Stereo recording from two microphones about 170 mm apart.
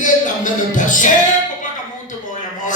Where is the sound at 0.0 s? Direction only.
50° left (ahead or behind).